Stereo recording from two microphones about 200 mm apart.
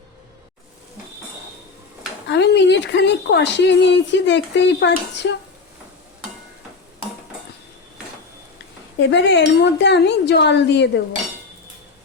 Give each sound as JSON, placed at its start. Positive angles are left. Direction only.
{"t": 2.2, "sound": "speech", "side_deg": 60}
{"t": 9.0, "sound": "speech", "side_deg": 60}